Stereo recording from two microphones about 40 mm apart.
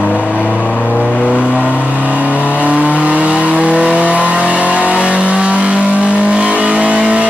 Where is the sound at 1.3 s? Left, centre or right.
Right.